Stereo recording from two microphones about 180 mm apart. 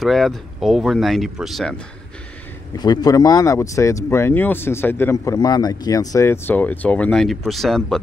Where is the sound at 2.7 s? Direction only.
20° left (ahead or behind); by 8.0 s centre (ahead or behind).